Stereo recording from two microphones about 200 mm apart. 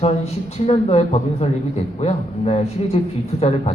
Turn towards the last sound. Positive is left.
turn(degrees=30)  # may be behind; listen again after turning